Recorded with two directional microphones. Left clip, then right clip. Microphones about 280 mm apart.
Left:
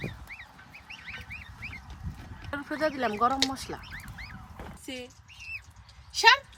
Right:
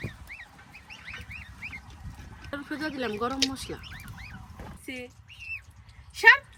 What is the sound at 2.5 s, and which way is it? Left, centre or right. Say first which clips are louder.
Speech: left 4 dB; centre.